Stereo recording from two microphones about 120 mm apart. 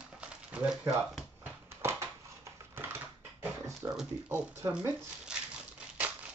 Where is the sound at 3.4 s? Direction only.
25° right (ahead or behind).